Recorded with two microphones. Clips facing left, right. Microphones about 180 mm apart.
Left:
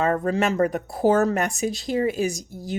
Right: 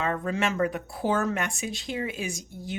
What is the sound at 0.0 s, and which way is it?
Speech, 40° left (ahead or behind).